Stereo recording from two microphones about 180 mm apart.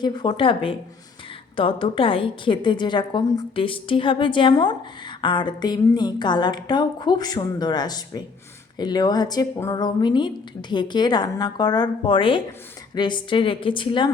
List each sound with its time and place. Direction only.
0.0 s speech: 25° left (ahead or behind)